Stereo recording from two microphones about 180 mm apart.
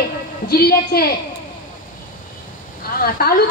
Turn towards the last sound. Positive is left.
turn(degrees=55)  # may be behind; listen again after turning